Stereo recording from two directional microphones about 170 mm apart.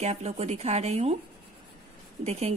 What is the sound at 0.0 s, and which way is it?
Speech, 40° right (ahead or behind).